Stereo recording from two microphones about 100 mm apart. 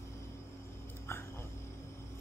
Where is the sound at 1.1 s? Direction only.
25° left (ahead or behind).